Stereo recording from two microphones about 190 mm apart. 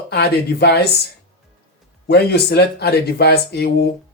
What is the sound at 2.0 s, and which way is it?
Speech, 60° left (ahead or behind).